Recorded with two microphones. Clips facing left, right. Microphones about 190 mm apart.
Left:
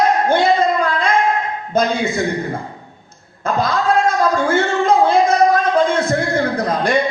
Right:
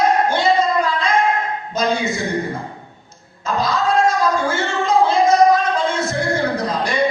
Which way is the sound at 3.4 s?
55° left (ahead or behind).